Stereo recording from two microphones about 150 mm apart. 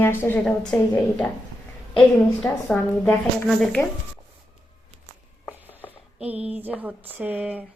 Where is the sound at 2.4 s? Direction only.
5° left (ahead or behind).